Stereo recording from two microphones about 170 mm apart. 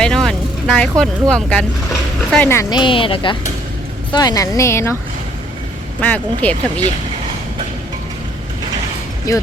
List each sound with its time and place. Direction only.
0.0 s speech: 5° left (ahead or behind)
2.6 s a woman's voice: 25° left (ahead or behind)
6.0 s speech: 10° left (ahead or behind)
9.3 s a woman's voice: 20° left (ahead or behind)